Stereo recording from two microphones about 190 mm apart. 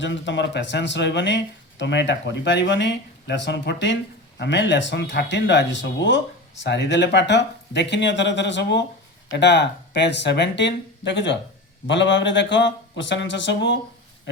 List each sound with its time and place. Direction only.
0.0 s speech: 75° left (ahead or behind)